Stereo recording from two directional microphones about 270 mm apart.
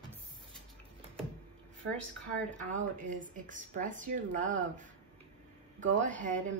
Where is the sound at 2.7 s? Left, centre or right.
Right.